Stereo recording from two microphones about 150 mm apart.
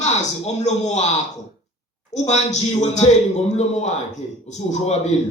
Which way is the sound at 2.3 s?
50° left (ahead or behind).